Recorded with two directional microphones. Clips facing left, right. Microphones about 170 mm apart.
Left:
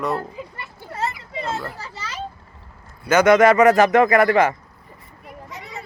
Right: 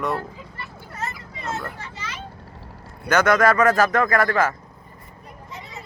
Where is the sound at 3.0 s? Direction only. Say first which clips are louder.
Left 4 dB; 10° left (ahead or behind).